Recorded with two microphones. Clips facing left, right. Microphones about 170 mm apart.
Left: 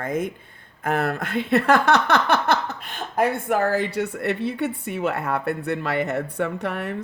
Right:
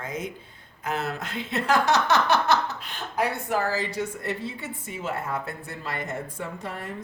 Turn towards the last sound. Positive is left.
turn(degrees=65)  # may be behind; listen again after turning